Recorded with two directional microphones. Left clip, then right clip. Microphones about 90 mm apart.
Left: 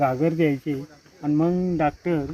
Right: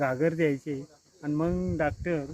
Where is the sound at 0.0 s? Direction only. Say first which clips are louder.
Left 5 dB; 5° right (ahead or behind).